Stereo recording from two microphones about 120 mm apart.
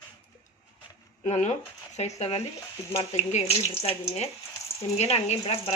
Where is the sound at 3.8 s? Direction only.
60° left (ahead or behind).